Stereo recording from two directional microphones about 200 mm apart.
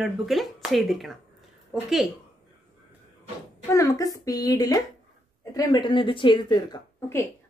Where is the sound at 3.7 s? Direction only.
15° left (ahead or behind).